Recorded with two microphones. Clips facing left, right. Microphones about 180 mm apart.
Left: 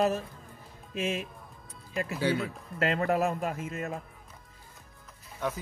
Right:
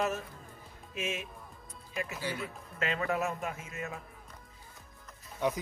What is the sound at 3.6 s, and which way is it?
Speech, 55° left (ahead or behind).